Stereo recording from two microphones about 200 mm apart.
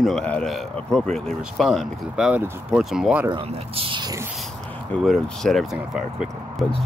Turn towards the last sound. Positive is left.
turn(degrees=0)  # may be behind; listen again after turning